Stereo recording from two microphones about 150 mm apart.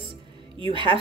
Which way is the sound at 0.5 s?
35° right (ahead or behind).